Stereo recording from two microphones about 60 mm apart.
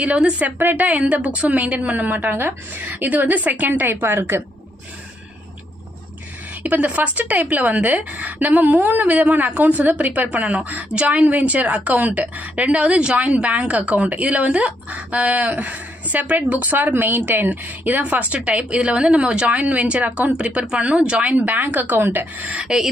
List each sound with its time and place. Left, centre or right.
0.0 s a woman's voice: right
6.6 s a woman's voice: right
22.6 s speech: centre